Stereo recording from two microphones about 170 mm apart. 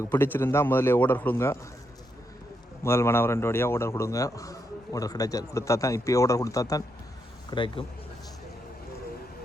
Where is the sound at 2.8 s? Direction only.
15° left (ahead or behind).